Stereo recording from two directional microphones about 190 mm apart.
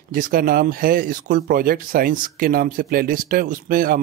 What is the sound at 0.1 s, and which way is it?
Speech, 50° right (ahead or behind).